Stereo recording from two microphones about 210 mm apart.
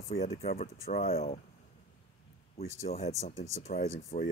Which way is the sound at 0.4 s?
30° left (ahead or behind).